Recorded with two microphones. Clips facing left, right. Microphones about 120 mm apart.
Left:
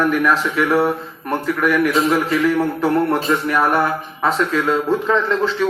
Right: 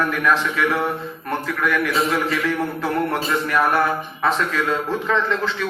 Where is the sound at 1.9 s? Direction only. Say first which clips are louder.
Left 4 dB; 25° left (ahead or behind).